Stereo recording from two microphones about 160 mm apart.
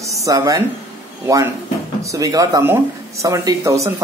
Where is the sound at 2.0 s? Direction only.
20° right (ahead or behind).